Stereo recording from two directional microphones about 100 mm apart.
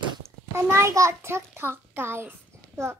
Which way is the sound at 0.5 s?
25° right (ahead or behind).